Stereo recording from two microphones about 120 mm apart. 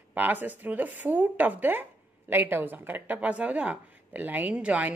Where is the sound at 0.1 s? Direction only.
15° right (ahead or behind).